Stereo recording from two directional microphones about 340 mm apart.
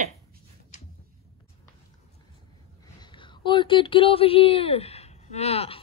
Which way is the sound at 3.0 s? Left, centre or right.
Centre.